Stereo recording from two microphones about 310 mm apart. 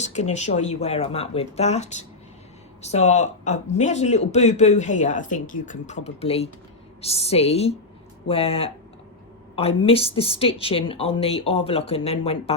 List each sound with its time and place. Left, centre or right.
0.0 s a woman's voice: left